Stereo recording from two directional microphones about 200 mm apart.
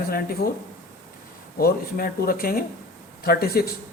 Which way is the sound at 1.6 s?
50° left (ahead or behind).